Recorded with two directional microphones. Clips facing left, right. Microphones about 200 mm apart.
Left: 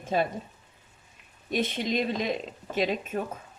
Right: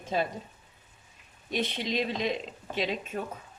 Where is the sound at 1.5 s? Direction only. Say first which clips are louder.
Left 3 dB; 50° left (ahead or behind).